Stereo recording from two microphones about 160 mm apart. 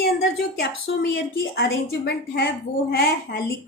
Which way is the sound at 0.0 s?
70° left (ahead or behind).